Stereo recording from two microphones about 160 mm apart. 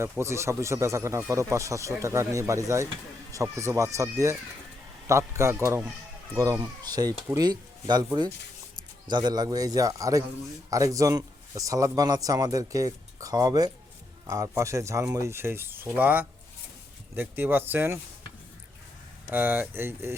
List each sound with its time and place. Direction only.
0.0 s a man's voice: 15° right (ahead or behind)
19.3 s speech: 10° right (ahead or behind)